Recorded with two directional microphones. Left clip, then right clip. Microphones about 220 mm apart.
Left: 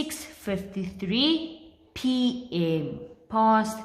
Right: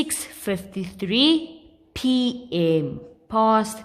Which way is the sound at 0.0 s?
45° right (ahead or behind).